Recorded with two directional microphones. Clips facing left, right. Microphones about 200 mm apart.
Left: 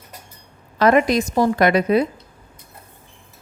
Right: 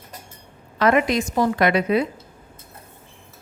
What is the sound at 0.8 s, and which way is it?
A woman's voice, 40° left (ahead or behind).